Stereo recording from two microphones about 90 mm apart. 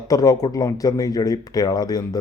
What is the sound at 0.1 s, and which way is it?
A man's voice, 40° left (ahead or behind).